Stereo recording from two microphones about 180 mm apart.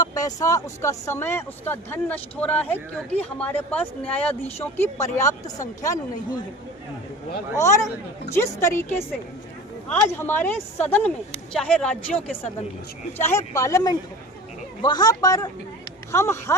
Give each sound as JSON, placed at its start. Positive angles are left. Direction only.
{"t": 0.0, "sound": "speech", "side_deg": 20}
{"t": 4.1, "sound": "speech", "side_deg": 35}
{"t": 5.1, "sound": "speech", "side_deg": 15}
{"t": 7.5, "sound": "a man's voice", "side_deg": 15}